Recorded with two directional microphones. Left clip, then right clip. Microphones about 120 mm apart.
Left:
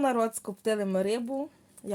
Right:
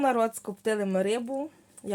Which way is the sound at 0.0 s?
15° right (ahead or behind).